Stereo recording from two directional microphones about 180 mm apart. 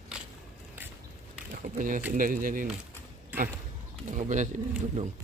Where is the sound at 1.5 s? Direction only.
50° right (ahead or behind).